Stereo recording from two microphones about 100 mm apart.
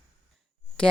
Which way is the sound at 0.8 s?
10° left (ahead or behind).